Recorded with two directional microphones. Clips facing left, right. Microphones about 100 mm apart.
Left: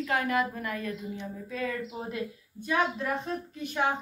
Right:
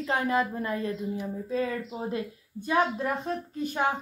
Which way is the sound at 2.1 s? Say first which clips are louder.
Right 3 dB; 35° right (ahead or behind).